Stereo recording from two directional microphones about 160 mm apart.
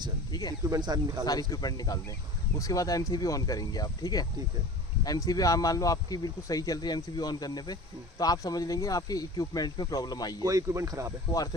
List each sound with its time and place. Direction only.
0.3 s speech: 25° left (ahead or behind)
0.6 s speech: 25° right (ahead or behind)
1.2 s speech: 25° left (ahead or behind)
10.4 s speech: 20° right (ahead or behind)